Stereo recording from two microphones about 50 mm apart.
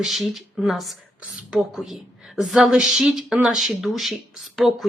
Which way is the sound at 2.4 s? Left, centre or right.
Centre.